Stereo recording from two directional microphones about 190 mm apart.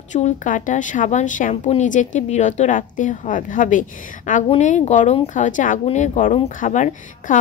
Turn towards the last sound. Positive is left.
turn(degrees=40)  # may be behind; listen again after turning